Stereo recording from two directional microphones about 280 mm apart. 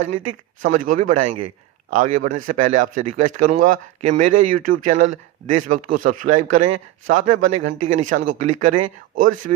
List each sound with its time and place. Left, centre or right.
0.0 s speech: right